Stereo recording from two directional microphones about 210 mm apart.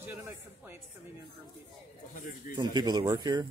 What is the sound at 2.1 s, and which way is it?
Speech, 40° left (ahead or behind).